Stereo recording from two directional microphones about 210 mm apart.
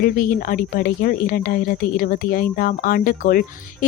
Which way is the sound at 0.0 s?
40° left (ahead or behind).